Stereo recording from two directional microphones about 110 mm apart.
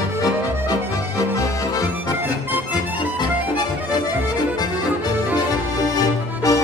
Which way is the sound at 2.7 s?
40° left (ahead or behind).